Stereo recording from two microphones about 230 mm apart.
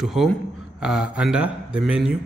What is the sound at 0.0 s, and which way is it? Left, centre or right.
A man's voice, centre.